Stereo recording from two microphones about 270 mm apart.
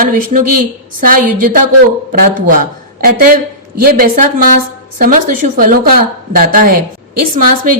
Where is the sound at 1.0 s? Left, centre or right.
Right.